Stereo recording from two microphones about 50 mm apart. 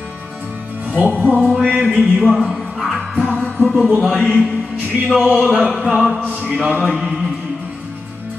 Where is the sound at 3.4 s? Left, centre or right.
Centre.